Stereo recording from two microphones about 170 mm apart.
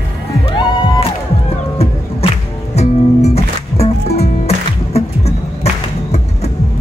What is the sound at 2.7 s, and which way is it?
Music, 40° left (ahead or behind).